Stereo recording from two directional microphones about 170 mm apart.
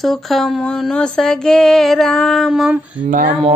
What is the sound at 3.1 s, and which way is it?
Speech, 50° right (ahead or behind).